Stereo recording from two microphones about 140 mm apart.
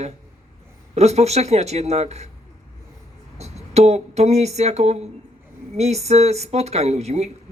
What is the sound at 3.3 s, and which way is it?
Speech, 50° right (ahead or behind).